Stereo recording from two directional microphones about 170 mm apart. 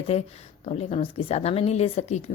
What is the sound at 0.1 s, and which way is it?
A woman's voice, 40° left (ahead or behind).